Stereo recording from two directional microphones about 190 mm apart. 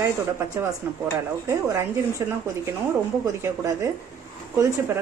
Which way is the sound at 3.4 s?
15° right (ahead or behind).